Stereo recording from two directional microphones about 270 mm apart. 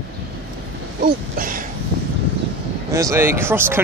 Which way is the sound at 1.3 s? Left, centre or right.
Right.